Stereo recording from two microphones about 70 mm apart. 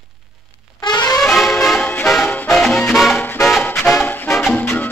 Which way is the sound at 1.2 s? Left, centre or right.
Centre.